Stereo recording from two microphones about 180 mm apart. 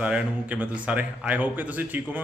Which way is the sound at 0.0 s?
5° right (ahead or behind).